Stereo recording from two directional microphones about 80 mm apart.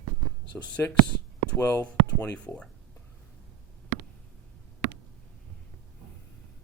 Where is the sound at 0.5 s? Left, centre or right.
Left.